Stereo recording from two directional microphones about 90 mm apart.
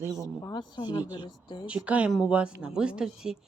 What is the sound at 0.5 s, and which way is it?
Speech, 55° left (ahead or behind).